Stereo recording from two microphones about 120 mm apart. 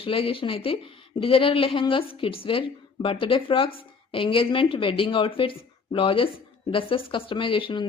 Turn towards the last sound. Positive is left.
turn(degrees=45)  # may be behind; listen again after turning